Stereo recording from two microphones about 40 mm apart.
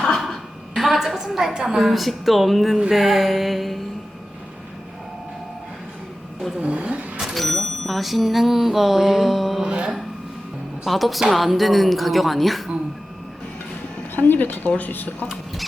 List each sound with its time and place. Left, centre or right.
0.0 s a sound: centre
0.7 s speech: centre
6.6 s speech: right
7.3 s speech: centre
9.6 s music: right
10.8 s speech: centre
14.2 s speech: left